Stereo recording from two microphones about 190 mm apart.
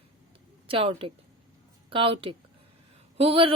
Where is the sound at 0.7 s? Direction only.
30° right (ahead or behind).